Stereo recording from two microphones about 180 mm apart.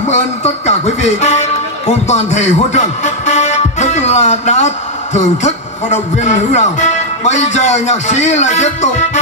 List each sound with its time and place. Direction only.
0.1 s music: 40° left (ahead or behind)
2.0 s speech: 40° left (ahead or behind)